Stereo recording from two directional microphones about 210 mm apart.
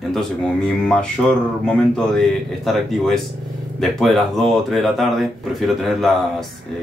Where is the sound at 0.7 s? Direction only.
5° left (ahead or behind).